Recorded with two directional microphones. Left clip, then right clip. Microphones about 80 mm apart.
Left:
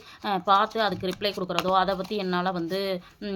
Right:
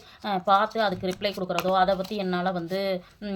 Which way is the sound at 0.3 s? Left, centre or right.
Left.